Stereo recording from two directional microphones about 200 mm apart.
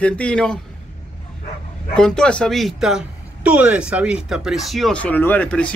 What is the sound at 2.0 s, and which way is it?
A man's voice, 5° left (ahead or behind).